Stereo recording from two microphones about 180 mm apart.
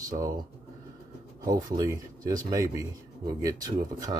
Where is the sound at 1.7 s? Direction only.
20° right (ahead or behind).